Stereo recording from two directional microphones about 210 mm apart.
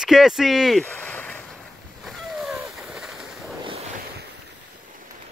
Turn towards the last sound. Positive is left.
turn(degrees=-30)  # may be behind; listen again after turning